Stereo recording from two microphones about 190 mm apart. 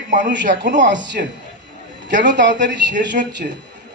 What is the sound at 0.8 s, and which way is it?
Speech, 70° right (ahead or behind).